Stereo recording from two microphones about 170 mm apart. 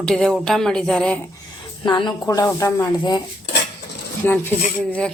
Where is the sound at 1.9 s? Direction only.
25° left (ahead or behind).